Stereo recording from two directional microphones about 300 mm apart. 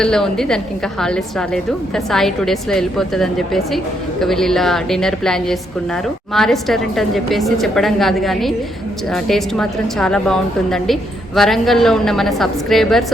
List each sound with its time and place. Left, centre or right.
0.0 s a woman's voice: centre